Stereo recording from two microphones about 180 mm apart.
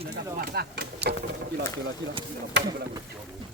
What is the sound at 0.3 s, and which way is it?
Speech, 60° right (ahead or behind).